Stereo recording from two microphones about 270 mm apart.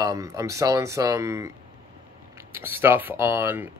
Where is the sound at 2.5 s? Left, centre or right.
Centre.